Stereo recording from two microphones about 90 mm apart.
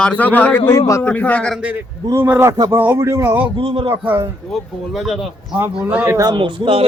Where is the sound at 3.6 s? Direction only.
90° right.